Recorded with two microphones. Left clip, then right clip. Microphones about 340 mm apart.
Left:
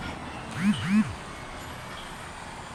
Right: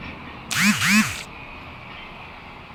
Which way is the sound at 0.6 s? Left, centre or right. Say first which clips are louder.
Right 10 dB; right.